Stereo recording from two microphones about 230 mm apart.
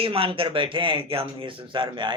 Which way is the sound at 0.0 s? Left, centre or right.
Right.